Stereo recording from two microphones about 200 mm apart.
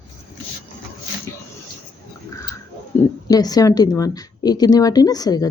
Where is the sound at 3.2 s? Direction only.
20° left (ahead or behind).